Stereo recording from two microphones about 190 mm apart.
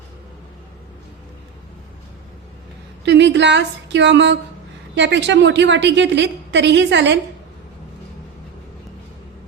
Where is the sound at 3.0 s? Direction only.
65° right (ahead or behind).